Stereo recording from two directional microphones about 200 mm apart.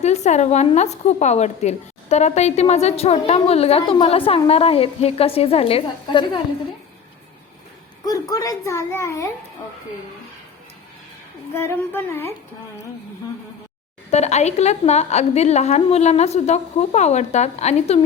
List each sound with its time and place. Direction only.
0.0 s a woman's voice: 35° left (ahead or behind)
8.0 s a woman's voice: 15° left (ahead or behind)
11.5 s a woman's voice: 10° left (ahead or behind)
14.1 s a woman's voice: 35° left (ahead or behind)